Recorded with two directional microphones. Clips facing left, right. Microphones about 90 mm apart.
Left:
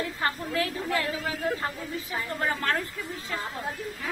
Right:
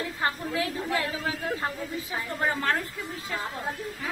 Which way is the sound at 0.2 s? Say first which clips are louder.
Right 1 dB; 20° right (ahead or behind).